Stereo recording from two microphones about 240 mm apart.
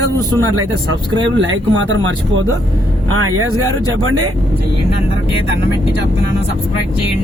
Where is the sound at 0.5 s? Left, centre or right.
Right.